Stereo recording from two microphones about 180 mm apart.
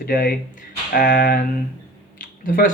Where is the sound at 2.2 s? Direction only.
50° left (ahead or behind).